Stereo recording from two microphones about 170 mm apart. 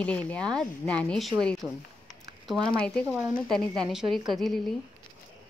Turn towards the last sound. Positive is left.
turn(degrees=0)  # may be behind; listen again after turning